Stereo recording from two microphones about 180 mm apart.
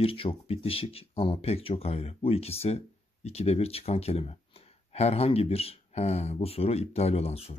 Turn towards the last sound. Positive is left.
turn(degrees=35)  # may be behind; listen again after turning